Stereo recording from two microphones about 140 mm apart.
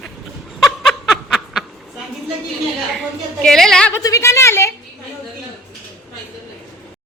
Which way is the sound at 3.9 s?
25° left (ahead or behind).